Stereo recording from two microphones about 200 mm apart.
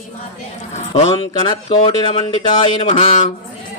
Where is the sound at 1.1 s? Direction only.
25° left (ahead or behind).